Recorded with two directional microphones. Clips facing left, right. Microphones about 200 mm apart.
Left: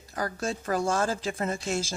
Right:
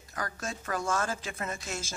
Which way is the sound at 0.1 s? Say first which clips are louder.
Left 6 dB; 30° left (ahead or behind).